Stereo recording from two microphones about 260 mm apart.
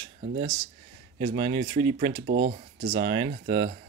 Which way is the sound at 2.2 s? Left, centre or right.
Right.